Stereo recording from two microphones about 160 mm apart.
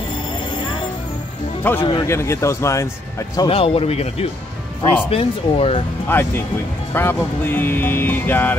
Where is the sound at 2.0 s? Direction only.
15° left (ahead or behind).